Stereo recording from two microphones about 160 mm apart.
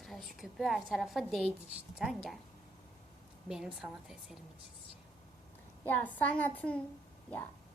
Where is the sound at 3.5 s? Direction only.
5° right (ahead or behind).